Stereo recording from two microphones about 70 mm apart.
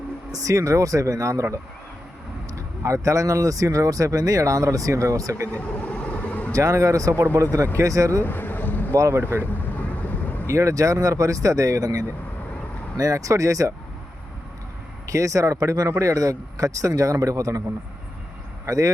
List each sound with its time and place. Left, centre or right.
0.3 s speech: right
2.6 s speech: right
5.5 s vehicle: left
6.5 s speech: right
8.2 s boat: left
9.0 s speech: right
9.4 s vehicle: left
10.4 s speech: right
15.0 s speech: right
18.6 s speech: right